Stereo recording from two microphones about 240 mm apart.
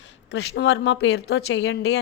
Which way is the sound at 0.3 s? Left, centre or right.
Left.